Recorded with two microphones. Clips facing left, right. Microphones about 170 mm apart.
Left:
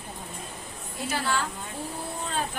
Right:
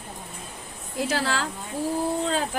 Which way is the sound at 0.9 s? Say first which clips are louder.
Right 3 dB; 90° right.